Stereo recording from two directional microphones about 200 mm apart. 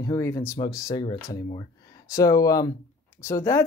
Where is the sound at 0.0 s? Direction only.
15° left (ahead or behind).